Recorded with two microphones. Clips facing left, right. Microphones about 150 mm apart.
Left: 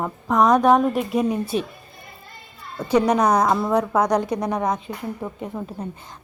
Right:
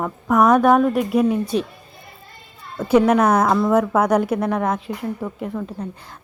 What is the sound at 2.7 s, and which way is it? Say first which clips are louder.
A woman's voice: right 3 dB; 5° right (ahead or behind).